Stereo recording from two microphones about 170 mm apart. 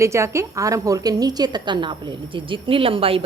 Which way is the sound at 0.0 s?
15° right (ahead or behind).